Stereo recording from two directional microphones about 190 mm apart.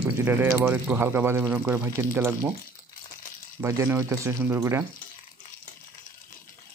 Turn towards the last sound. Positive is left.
turn(degrees=-15)  # may be behind; listen again after turning